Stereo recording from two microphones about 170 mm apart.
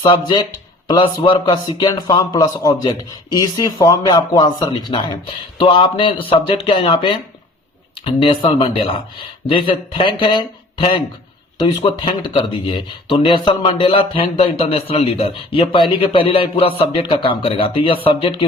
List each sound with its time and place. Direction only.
0.0 s speech: 25° left (ahead or behind)